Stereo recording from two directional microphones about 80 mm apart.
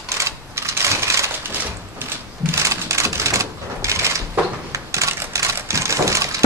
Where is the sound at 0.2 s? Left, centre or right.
Right.